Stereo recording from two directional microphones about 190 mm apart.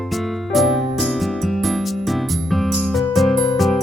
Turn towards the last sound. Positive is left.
turn(degrees=0)  # may be behind; listen again after turning